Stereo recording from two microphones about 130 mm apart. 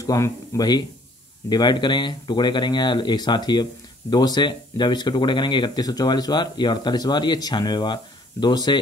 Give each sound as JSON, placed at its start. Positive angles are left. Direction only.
{"t": 0.0, "sound": "speech", "side_deg": 25}
{"t": 1.5, "sound": "speech", "side_deg": 35}